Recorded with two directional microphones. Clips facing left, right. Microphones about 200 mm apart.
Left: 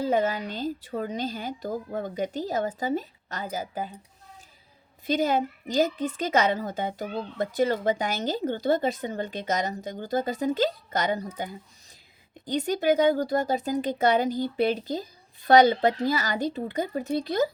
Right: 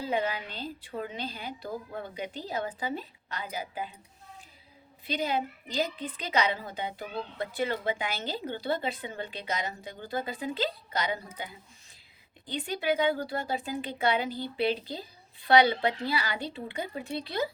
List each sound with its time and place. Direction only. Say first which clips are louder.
0.0 s a woman's voice: left 6 dB; 45° left (ahead or behind)
5.0 s a woman's voice: left 6 dB; 45° left (ahead or behind)